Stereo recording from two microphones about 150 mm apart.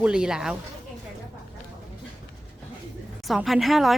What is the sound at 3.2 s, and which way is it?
Speech, centre (ahead or behind).